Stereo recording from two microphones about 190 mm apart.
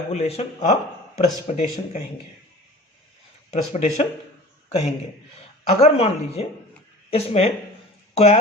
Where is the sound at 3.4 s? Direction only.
35° left (ahead or behind).